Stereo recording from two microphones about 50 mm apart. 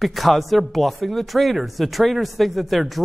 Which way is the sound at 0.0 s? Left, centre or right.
Centre.